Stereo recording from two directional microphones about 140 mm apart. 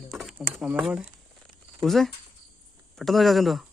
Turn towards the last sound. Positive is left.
turn(degrees=0)  # may be behind; listen again after turning